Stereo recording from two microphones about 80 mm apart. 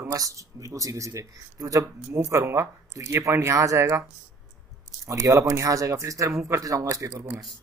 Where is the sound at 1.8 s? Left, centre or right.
Right.